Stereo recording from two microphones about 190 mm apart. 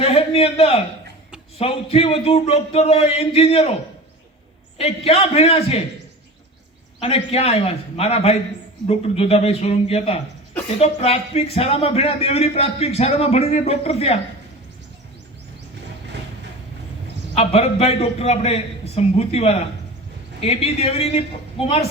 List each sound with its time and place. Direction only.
0.0 s a sound: 30° left (ahead or behind)
1.5 s speech: 30° left (ahead or behind)
4.8 s speech: 30° left (ahead or behind)
7.0 s speech: 30° left (ahead or behind)
17.3 s speech: 35° left (ahead or behind)